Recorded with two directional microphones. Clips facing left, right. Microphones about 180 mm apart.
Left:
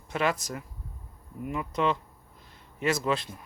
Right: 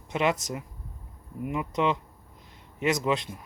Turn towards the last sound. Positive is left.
turn(degrees=-20)  # may be behind; listen again after turning